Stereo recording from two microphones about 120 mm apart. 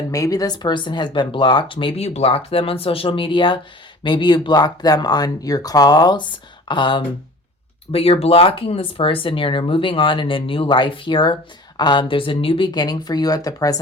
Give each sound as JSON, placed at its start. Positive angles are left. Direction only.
{"t": 0.1, "sound": "speech", "side_deg": 30}
{"t": 7.9, "sound": "speech", "side_deg": 55}